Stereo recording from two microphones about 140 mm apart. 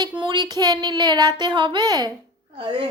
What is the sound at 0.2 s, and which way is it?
A woman's voice, 30° right (ahead or behind).